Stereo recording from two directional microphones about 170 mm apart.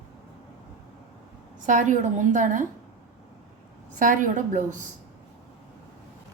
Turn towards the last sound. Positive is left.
turn(degrees=-50)  # may be behind; listen again after turning